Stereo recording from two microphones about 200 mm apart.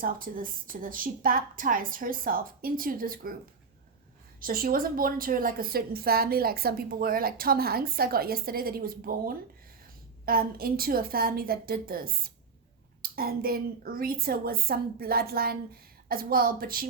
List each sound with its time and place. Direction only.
0.0 s a woman's voice: 45° right (ahead or behind)
4.4 s a woman's voice: 45° right (ahead or behind)